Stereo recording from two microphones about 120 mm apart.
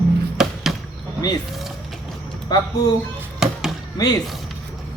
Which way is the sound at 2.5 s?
35° left (ahead or behind).